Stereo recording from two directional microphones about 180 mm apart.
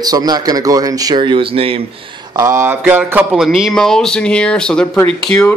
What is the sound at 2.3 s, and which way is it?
Speech, 20° right (ahead or behind).